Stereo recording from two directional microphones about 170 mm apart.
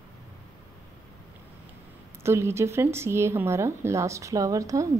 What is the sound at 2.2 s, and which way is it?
Speech, 15° right (ahead or behind).